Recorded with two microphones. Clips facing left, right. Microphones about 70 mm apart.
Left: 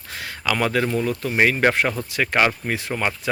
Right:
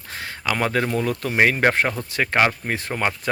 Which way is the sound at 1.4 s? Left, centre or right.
Right.